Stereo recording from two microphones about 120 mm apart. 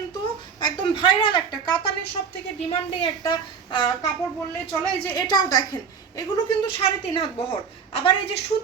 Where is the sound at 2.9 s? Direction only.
40° left (ahead or behind).